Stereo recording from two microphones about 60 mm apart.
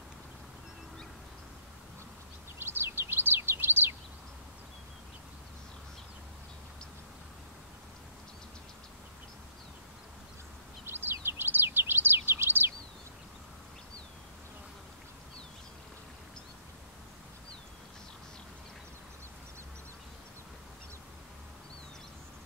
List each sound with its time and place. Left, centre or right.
2.6 s bird: right
10.9 s bird: right